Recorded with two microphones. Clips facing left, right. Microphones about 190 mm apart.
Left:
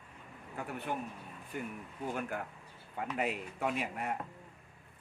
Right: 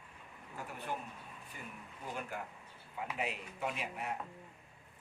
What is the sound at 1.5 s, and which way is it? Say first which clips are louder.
Speech: left 11 dB; 55° left (ahead or behind).